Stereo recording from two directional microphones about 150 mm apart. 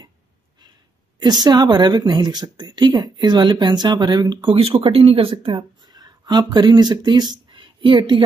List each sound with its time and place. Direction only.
1.2 s speech: 30° right (ahead or behind)